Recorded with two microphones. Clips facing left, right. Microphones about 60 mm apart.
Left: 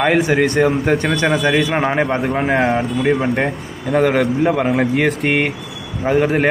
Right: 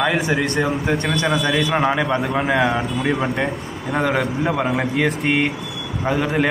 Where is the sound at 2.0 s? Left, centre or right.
Left.